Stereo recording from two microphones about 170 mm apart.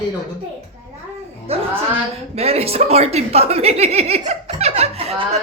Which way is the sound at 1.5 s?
35° right (ahead or behind).